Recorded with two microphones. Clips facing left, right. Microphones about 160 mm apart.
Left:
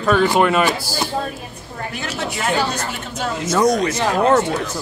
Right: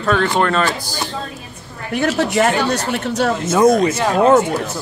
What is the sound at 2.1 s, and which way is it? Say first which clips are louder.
Speech: right 3 dB; 70° right (ahead or behind).